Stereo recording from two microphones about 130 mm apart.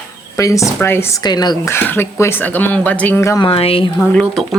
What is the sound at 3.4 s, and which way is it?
Speech, 50° left (ahead or behind).